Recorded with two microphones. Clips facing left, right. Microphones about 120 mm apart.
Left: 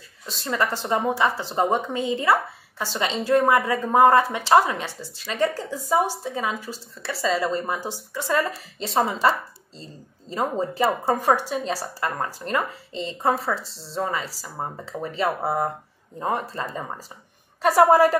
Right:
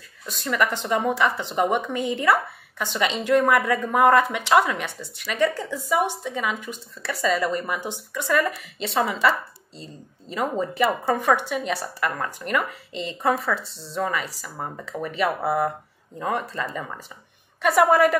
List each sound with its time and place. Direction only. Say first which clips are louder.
0.3 s a woman's voice: right 1 dB; 25° left (ahead or behind)
10.6 s a woman's voice: even; 30° left (ahead or behind)